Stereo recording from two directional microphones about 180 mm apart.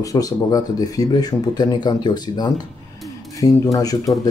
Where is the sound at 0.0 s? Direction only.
20° left (ahead or behind).